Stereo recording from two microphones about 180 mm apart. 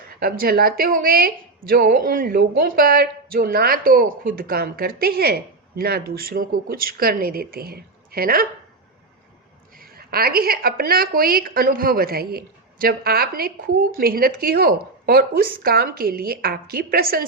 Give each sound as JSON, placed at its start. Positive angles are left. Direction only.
{"t": 0.2, "sound": "a woman's voice", "side_deg": -55}
{"t": 9.7, "sound": "a woman's voice", "side_deg": -55}